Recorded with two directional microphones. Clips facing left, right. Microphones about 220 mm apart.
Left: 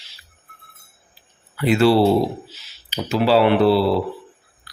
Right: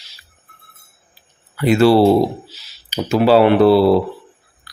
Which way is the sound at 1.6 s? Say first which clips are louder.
Right 4 dB; 45° right (ahead or behind).